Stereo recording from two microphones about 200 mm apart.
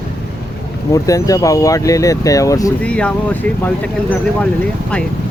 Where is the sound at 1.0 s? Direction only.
15° left (ahead or behind).